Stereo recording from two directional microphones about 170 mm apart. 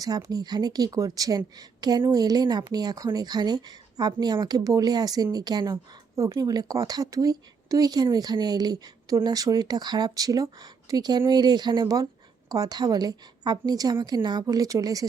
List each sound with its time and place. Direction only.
0.0 s a woman's voice: 20° right (ahead or behind)